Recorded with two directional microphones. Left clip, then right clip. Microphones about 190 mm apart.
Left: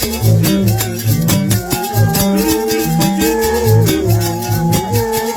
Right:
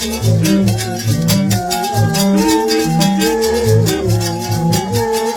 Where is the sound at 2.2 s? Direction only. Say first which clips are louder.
Right 2 dB; 5° left (ahead or behind).